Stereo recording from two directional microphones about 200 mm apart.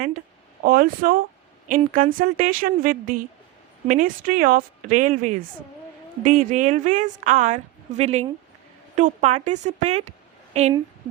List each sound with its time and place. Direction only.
0.6 s a woman's voice: 45° right (ahead or behind)